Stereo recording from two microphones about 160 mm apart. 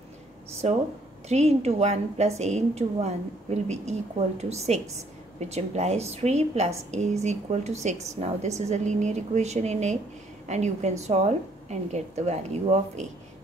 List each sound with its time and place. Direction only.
0.6 s a woman's voice: 40° right (ahead or behind)